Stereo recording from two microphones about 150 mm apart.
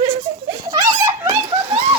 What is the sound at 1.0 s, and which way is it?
Snicker, 30° right (ahead or behind).